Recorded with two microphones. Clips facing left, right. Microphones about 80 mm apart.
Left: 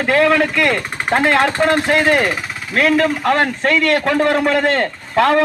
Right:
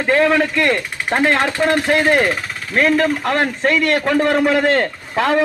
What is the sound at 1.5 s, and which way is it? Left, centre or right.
Speech, left.